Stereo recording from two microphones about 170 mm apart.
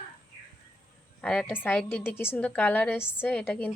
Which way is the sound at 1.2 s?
5° left (ahead or behind).